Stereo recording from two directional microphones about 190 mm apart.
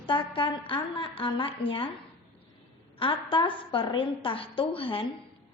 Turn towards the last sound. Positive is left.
turn(degrees=25)  # may be behind; listen again after turning